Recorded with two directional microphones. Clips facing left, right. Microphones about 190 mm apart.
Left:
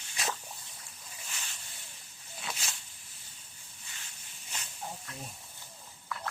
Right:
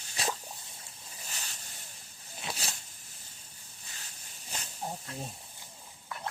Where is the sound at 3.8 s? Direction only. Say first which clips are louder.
Right 1 dB; 40° right (ahead or behind).